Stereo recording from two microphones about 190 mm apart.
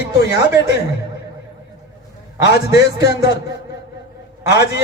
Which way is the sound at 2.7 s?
60° left (ahead or behind).